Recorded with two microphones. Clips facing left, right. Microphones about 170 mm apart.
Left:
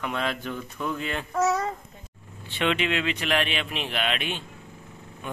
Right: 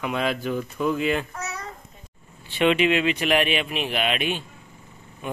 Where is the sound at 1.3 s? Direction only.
90° left.